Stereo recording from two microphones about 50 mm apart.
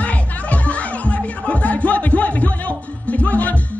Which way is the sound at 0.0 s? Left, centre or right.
Left.